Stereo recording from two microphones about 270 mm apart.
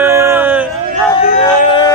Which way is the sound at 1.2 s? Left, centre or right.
Left.